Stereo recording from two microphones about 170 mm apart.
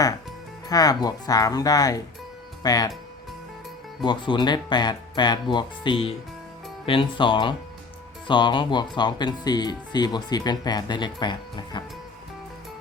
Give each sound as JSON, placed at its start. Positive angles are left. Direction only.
{"t": 0.7, "sound": "speech", "side_deg": 20}
{"t": 4.0, "sound": "speech", "side_deg": 25}